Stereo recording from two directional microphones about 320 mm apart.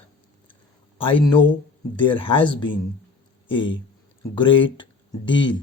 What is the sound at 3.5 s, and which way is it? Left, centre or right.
Speech, centre.